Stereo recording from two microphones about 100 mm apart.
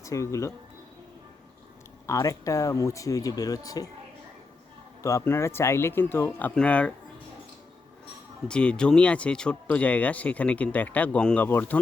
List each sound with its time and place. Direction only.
0.0 s speech: 30° left (ahead or behind)
2.0 s speech: 30° left (ahead or behind)
5.0 s speech: 30° left (ahead or behind)
6.5 s speech: 10° left (ahead or behind)
8.4 s speech: 10° left (ahead or behind)